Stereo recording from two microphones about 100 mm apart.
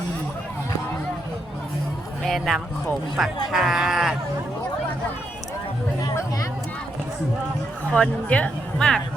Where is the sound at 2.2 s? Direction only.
Centre (ahead or behind).